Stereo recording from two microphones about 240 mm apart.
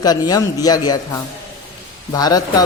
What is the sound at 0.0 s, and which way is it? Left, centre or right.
Speech, centre.